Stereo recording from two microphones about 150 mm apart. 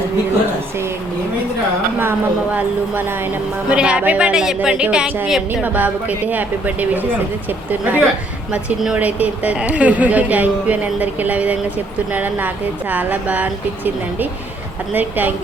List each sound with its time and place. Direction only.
2.0 s a woman's voice: 10° right (ahead or behind)